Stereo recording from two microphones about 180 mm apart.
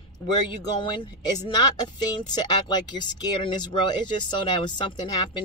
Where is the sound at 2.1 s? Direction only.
25° left (ahead or behind).